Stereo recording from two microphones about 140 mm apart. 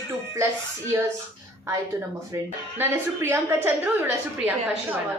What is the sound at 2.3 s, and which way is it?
A woman's voice, 20° right (ahead or behind).